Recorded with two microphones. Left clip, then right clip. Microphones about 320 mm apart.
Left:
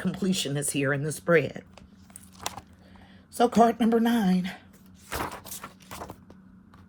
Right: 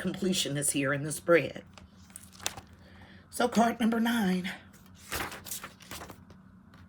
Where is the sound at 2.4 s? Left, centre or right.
Centre.